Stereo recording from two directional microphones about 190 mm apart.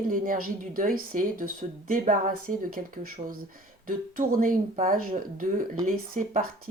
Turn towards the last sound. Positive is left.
turn(degrees=-45)  # may be behind; listen again after turning